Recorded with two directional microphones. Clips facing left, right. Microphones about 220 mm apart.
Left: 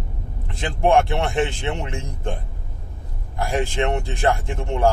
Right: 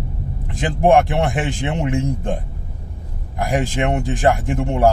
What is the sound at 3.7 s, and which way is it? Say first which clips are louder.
Speech: right 3 dB; 15° right (ahead or behind).